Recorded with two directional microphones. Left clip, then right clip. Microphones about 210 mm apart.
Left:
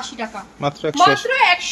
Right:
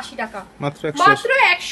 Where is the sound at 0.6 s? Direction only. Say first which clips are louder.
Left 3 dB; 10° right (ahead or behind).